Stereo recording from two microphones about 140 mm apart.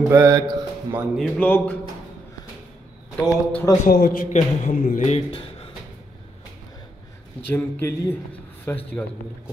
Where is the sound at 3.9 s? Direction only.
90° left; by 5.2 s 65° left (ahead or behind).